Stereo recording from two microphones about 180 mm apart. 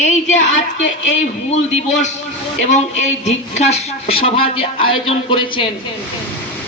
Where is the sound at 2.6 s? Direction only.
40° left (ahead or behind).